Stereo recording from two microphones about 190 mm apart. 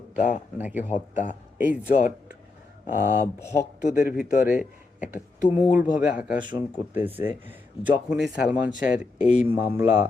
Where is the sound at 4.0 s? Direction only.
45° left (ahead or behind).